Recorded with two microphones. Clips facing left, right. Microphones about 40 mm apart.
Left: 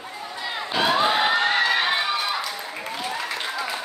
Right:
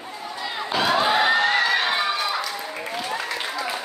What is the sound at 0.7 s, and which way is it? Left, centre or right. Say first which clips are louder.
Crowd: even; centre.